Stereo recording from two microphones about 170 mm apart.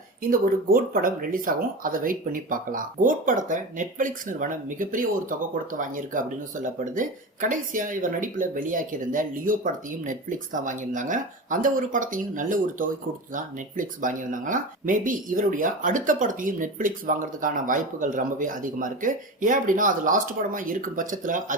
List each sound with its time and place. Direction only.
0.2 s speech: 60° right (ahead or behind)